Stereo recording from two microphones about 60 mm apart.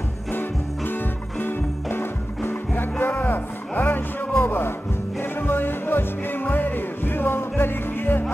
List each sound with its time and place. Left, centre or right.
0.3 s music: left